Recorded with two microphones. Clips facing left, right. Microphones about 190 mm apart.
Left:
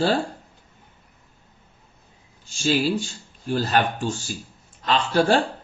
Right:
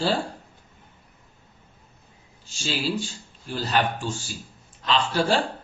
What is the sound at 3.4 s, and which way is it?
Speech, 50° left (ahead or behind).